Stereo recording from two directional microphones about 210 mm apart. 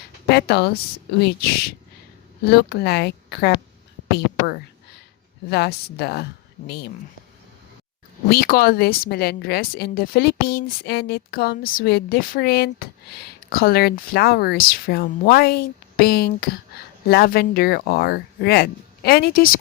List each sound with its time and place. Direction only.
0.3 s speech: 50° left (ahead or behind)
5.5 s speech: 50° left (ahead or behind)
8.3 s speech: 45° left (ahead or behind)